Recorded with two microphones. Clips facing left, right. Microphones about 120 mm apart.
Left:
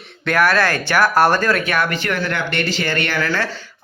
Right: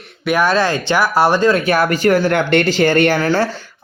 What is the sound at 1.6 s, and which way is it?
Speech, 35° right (ahead or behind).